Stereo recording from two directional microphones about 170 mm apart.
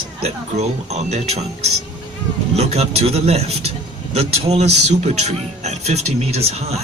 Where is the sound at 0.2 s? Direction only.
40° right (ahead or behind).